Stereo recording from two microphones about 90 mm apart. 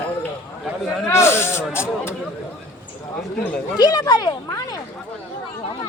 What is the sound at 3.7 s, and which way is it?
Speech, 45° left (ahead or behind).